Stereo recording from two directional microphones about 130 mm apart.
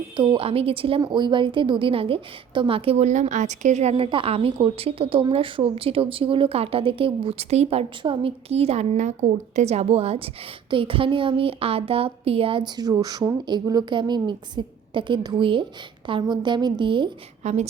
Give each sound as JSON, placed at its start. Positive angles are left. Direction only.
{"t": 0.2, "sound": "speech", "side_deg": -45}
{"t": 17.4, "sound": "a woman's voice", "side_deg": -60}